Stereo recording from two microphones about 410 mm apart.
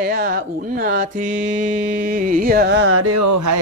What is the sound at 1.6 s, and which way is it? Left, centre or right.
Music, centre.